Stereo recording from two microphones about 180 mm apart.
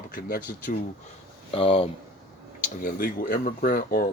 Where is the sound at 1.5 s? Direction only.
30° left (ahead or behind).